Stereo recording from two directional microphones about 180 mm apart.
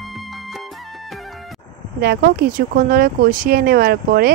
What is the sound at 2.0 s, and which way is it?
Speech, 60° right (ahead or behind).